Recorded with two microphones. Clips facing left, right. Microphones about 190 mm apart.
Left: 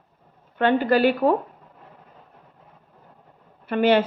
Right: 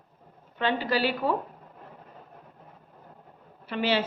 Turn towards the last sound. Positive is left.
turn(degrees=55)  # may be behind; listen again after turning